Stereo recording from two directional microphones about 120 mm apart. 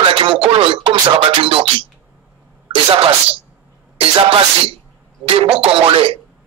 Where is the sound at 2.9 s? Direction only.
50° right (ahead or behind).